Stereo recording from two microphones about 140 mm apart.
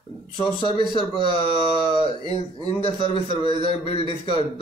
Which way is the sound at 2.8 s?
45° left (ahead or behind).